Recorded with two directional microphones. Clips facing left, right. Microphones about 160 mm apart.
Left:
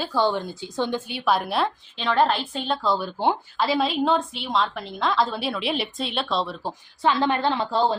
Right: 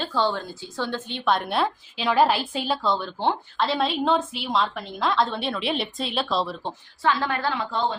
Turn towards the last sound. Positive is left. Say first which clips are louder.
# left 4 dB
turn(degrees=35)  # may be behind; listen again after turning